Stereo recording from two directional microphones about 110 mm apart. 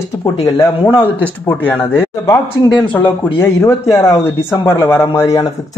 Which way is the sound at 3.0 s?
20° left (ahead or behind).